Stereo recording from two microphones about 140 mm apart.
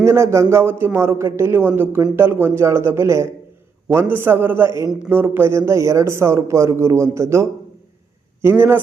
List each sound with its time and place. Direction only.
0.0 s a man's voice: 20° right (ahead or behind)